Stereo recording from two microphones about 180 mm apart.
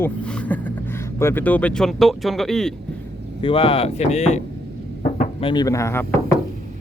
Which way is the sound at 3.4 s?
30° left (ahead or behind).